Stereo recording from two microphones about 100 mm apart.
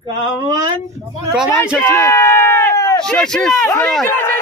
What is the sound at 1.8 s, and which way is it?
Speech, 25° left (ahead or behind).